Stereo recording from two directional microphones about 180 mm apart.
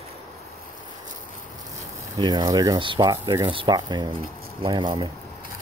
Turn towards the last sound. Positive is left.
turn(degrees=-30)  # may be behind; listen again after turning